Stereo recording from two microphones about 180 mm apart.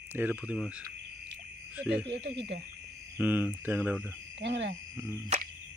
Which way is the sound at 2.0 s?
70° right (ahead or behind).